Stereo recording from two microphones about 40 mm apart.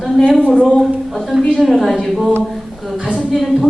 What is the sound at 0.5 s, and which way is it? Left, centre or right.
Speech, left.